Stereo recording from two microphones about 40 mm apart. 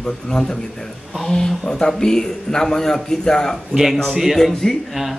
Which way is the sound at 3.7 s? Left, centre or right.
Centre.